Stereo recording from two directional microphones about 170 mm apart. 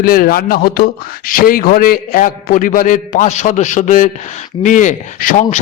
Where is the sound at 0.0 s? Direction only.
60° left (ahead or behind).